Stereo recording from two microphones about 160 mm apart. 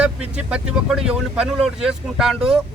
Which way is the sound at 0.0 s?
5° right (ahead or behind).